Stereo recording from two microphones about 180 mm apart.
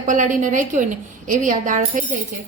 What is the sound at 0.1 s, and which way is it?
A woman's voice, 45° right (ahead or behind).